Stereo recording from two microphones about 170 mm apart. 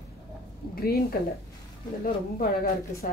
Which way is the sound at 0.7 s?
65° left (ahead or behind).